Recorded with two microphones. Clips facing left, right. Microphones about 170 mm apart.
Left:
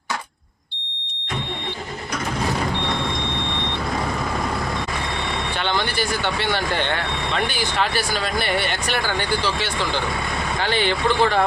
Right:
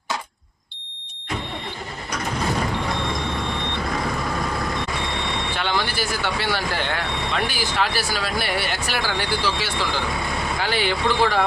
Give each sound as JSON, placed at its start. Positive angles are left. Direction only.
{"t": 5.6, "sound": "speech", "side_deg": -5}